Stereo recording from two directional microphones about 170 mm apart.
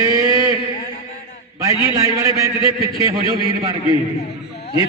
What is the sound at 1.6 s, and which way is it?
A man's voice, 20° right (ahead or behind).